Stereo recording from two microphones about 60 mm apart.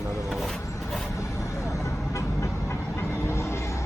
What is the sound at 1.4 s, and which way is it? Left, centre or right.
Vehicle, left.